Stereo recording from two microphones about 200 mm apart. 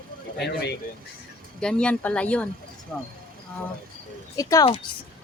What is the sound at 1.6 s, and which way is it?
Speech, 5° left (ahead or behind).